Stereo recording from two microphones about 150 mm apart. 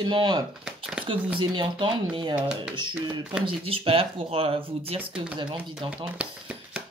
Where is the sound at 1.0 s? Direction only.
10° right (ahead or behind).